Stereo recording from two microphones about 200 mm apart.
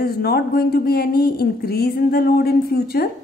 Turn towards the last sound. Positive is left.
turn(degrees=50)  # may be behind; listen again after turning